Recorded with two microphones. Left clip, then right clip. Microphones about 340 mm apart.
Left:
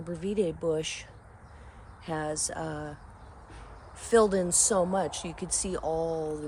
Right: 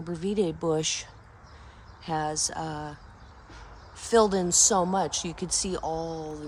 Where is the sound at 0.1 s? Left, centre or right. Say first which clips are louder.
Right 2 dB; centre.